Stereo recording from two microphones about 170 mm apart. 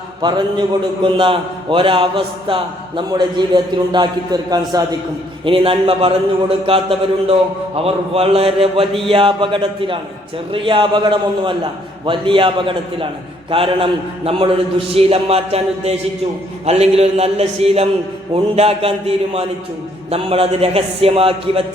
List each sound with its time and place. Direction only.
0.2 s a man's voice: 25° right (ahead or behind)